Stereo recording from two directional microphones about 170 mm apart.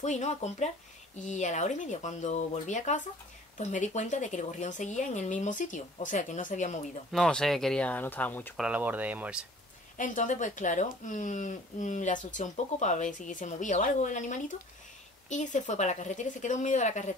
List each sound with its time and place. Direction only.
0.0 s speech: 45° left (ahead or behind)
7.1 s speech: 5° left (ahead or behind)
8.5 s speech: 5° right (ahead or behind)
9.9 s speech: 50° left (ahead or behind)